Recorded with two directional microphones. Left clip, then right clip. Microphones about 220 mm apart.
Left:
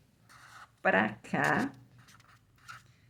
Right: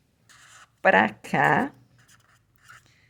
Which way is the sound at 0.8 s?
45° right (ahead or behind).